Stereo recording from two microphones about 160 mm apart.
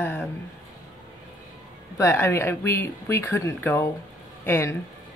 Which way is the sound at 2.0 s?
15° left (ahead or behind).